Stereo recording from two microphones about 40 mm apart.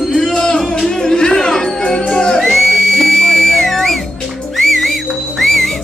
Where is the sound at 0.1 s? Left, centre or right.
Centre.